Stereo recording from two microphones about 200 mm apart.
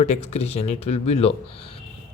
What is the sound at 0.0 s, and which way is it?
Speech, 35° left (ahead or behind).